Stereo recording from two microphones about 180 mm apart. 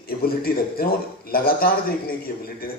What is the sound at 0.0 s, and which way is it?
A man's voice, 55° left (ahead or behind).